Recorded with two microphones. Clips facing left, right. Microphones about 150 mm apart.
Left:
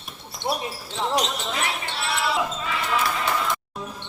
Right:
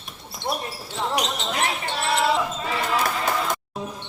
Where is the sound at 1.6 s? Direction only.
45° right (ahead or behind).